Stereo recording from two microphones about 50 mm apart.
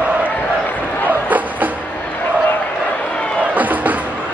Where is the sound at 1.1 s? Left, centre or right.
Right.